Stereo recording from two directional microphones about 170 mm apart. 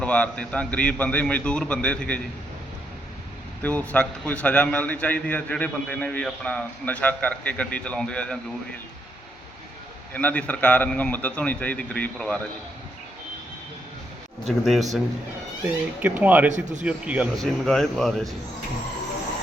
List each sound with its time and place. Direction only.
0.0 s a man's voice: 5° left (ahead or behind)
3.6 s a man's voice: 10° left (ahead or behind)
10.1 s a man's voice: 10° left (ahead or behind)
14.4 s speech: centre (ahead or behind)
16.5 s speech: 45° right (ahead or behind)
16.8 s speech: 10° right (ahead or behind)
17.3 s speech: centre (ahead or behind)